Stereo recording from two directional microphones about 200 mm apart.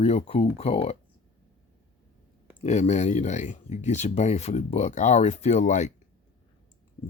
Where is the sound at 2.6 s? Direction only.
35° left (ahead or behind).